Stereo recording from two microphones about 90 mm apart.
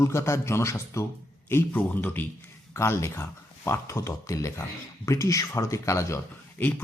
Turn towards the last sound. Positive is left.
turn(degrees=30)  # may be behind; listen again after turning